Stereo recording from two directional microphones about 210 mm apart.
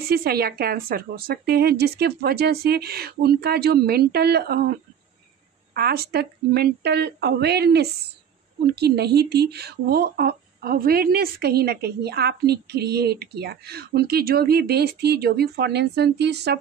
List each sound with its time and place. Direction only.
0.1 s speech: 45° right (ahead or behind)
5.8 s speech: 50° right (ahead or behind)